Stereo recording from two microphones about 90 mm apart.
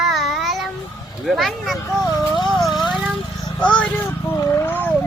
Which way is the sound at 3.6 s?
10° left (ahead or behind).